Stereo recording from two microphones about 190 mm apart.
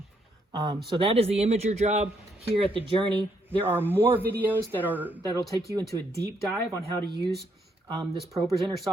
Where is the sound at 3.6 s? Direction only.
10° right (ahead or behind).